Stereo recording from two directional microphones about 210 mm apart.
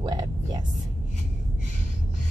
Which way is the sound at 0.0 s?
20° right (ahead or behind).